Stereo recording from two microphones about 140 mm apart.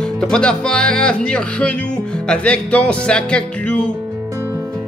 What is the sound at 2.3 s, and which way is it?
Music, 10° left (ahead or behind).